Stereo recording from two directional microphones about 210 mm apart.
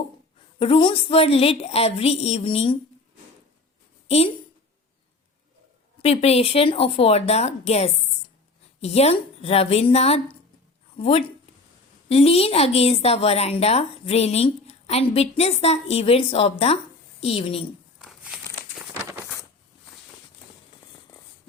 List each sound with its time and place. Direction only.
0.6 s a woman's voice: 25° left (ahead or behind)
6.0 s a woman's voice: 30° left (ahead or behind)
18.0 s crumpling: centre (ahead or behind)